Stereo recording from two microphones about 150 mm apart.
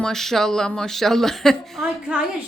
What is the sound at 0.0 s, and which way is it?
A woman's voice, 5° left (ahead or behind).